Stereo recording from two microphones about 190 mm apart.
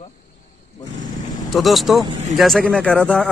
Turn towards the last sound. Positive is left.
turn(degrees=5)  # may be behind; listen again after turning